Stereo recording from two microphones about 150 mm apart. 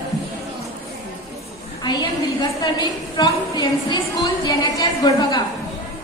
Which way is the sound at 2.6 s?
30° left (ahead or behind).